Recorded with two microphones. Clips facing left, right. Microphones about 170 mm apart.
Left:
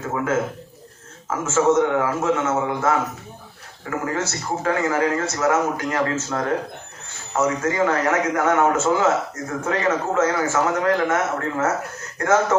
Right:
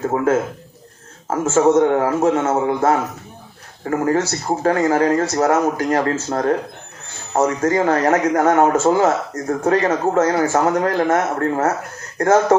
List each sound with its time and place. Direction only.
1.3 s a man's voice: 35° right (ahead or behind)